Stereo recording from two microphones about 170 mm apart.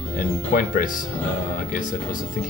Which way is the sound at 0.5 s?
55° left (ahead or behind).